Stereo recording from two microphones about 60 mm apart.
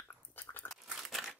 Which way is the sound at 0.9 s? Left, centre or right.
Centre.